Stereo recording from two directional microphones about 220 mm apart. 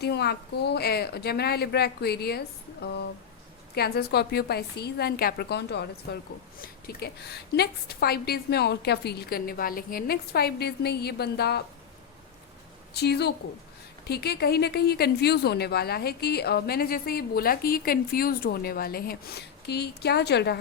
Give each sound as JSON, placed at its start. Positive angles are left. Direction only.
{"t": 0.0, "sound": "a woman's voice", "side_deg": 50}
{"t": 12.9, "sound": "a woman's voice", "side_deg": 50}